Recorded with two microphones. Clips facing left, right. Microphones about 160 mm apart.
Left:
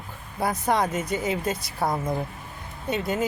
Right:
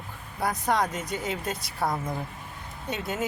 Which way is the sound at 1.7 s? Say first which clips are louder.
Left 2 dB; 20° left (ahead or behind).